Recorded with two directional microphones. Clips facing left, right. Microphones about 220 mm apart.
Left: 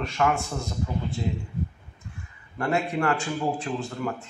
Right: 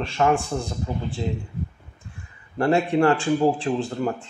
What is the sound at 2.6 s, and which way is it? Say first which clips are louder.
A man's voice: right 7 dB; 30° right (ahead or behind).